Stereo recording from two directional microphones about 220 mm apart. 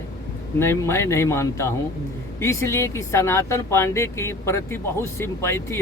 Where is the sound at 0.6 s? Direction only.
10° left (ahead or behind).